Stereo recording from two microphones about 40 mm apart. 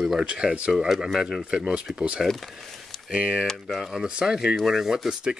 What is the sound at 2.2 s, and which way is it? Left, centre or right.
Speech, centre.